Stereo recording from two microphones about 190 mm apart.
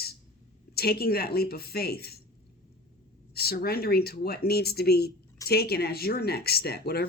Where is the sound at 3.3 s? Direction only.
55° left (ahead or behind).